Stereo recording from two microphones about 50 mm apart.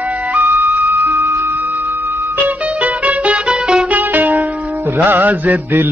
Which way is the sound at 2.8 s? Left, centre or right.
Right.